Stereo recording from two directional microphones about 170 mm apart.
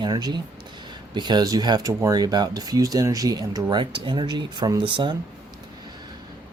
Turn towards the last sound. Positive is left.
turn(degrees=-25)  # may be behind; listen again after turning